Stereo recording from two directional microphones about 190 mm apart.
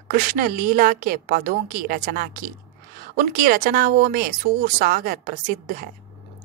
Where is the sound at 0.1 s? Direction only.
50° right (ahead or behind).